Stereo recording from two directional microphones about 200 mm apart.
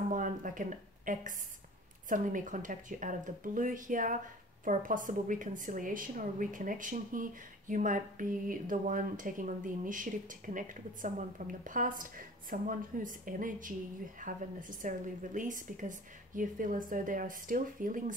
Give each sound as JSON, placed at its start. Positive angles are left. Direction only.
{"t": 0.1, "sound": "a woman's voice", "side_deg": -40}